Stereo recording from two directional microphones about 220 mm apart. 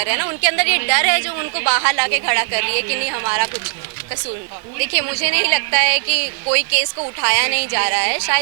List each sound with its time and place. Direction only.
0.0 s a woman's voice: 15° right (ahead or behind)
4.8 s a woman's voice: 10° right (ahead or behind)